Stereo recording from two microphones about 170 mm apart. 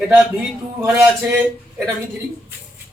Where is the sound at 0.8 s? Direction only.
10° right (ahead or behind).